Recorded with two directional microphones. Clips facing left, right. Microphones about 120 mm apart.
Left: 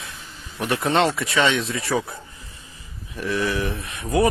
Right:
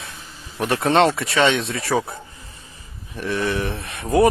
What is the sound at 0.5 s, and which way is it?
Speech, 30° right (ahead or behind).